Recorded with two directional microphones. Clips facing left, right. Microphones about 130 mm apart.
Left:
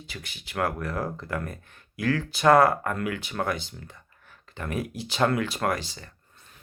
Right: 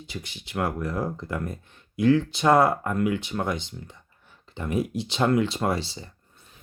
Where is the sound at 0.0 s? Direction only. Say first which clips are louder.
Right 4 dB; 20° right (ahead or behind).